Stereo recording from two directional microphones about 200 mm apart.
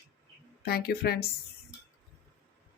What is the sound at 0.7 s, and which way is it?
Speech, 50° left (ahead or behind).